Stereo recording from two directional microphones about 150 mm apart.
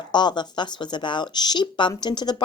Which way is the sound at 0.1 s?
30° left (ahead or behind).